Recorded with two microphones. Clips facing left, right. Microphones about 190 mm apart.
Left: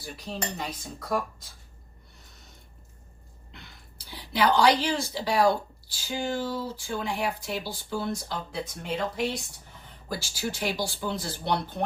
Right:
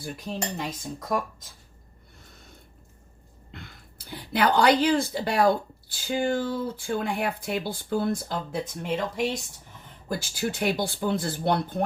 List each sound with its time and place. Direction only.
0.5 s speech: 45° right (ahead or behind)
3.5 s a woman's voice: 50° right (ahead or behind)